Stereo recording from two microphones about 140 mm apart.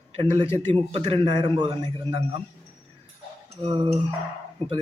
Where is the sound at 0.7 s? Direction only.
50° right (ahead or behind).